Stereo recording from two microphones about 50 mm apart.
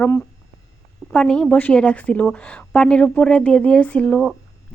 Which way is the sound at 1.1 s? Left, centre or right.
Centre.